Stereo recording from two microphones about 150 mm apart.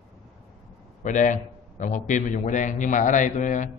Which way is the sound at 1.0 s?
55° left (ahead or behind).